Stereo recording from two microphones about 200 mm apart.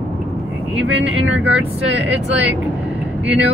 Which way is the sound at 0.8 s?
70° right (ahead or behind).